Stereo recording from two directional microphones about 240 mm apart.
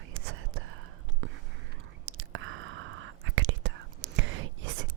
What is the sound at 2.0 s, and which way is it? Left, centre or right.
Whispering, right.